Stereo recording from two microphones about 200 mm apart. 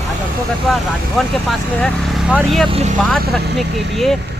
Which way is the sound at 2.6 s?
30° right (ahead or behind).